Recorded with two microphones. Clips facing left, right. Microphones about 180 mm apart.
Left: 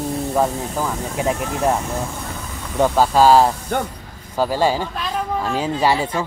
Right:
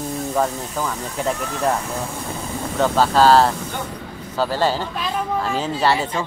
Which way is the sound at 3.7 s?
55° left (ahead or behind).